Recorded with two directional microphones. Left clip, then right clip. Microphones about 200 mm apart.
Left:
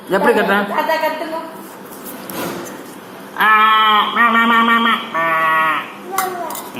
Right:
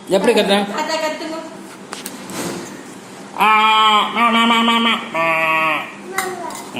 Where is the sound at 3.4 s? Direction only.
15° right (ahead or behind).